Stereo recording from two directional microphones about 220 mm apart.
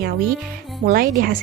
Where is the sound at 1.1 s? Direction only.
40° right (ahead or behind).